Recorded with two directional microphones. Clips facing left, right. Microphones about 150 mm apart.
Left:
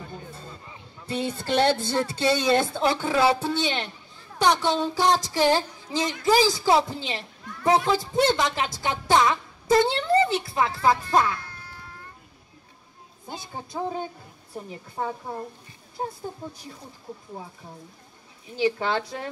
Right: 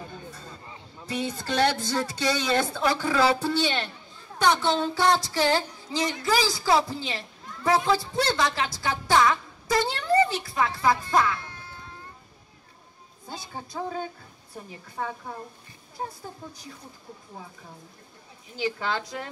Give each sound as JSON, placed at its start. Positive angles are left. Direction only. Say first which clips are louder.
{"t": 1.1, "sound": "a woman's voice", "louder": "left 3 dB", "side_deg": 25}
{"t": 11.4, "sound": "cat", "louder": "right 1 dB", "side_deg": -20}
{"t": 13.3, "sound": "speech", "louder": "left 2 dB", "side_deg": 20}
{"t": 18.6, "sound": "speech", "louder": "left 5 dB", "side_deg": 30}